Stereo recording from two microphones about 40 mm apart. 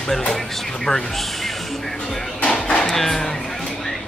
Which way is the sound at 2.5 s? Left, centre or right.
Left.